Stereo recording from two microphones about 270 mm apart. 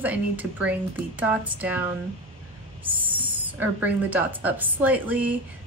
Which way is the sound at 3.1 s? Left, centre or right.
Centre.